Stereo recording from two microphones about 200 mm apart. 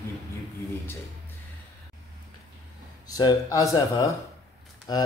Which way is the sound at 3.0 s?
15° left (ahead or behind).